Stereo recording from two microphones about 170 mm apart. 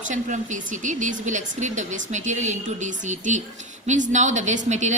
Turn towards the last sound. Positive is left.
turn(degrees=-45)  # may be behind; listen again after turning